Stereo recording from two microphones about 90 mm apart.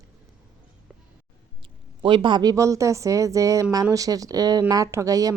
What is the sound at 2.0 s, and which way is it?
A woman's voice, 65° right (ahead or behind).